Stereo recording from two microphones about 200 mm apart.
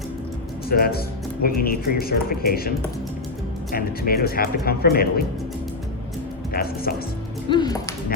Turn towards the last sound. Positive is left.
turn(degrees=20)  # may be behind; listen again after turning